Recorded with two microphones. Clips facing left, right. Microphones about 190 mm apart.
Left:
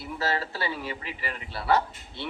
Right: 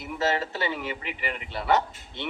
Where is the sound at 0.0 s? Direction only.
20° right (ahead or behind).